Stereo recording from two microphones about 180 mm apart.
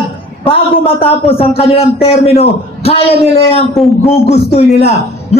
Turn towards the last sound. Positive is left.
turn(degrees=35)  # may be behind; listen again after turning